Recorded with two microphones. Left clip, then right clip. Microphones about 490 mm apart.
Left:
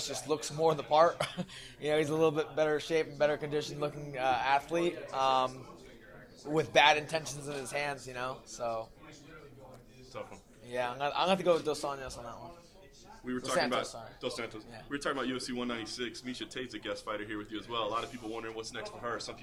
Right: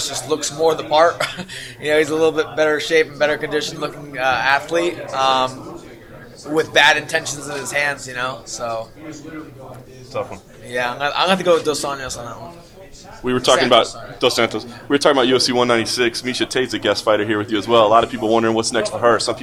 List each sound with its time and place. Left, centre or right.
0.0 s speech: left
6.5 s speech: left
10.1 s a man's voice: right
10.7 s speech: left
13.2 s a man's voice: right